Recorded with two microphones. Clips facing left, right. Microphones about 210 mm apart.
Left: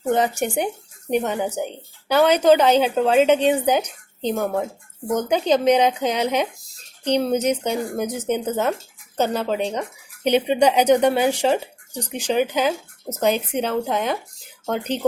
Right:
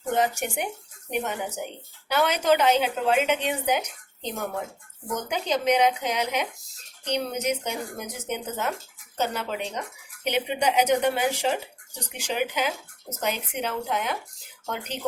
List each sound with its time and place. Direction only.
0.0 s speech: 35° left (ahead or behind)